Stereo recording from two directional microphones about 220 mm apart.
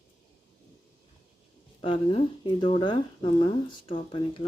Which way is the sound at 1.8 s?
25° left (ahead or behind).